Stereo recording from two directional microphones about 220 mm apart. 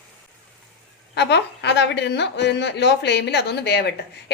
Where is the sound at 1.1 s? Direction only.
50° left (ahead or behind).